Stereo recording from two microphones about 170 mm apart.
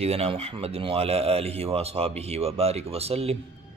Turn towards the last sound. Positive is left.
turn(degrees=-35)  # may be behind; listen again after turning